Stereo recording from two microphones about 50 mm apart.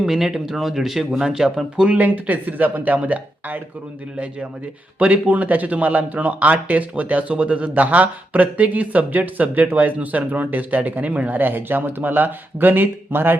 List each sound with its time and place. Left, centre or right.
0.0 s speech: centre
1.9 s speech: right
4.9 s speech: right